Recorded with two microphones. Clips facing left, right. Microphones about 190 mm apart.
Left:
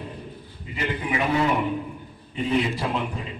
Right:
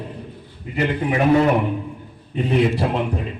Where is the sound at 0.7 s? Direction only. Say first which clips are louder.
Right 6 dB; 55° right (ahead or behind).